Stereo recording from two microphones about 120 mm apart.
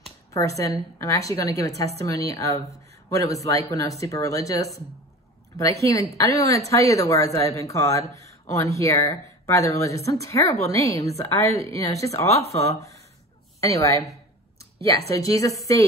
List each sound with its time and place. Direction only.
0.3 s speech: 25° left (ahead or behind)